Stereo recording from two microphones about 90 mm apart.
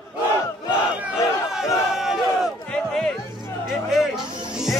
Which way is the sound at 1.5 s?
5° right (ahead or behind).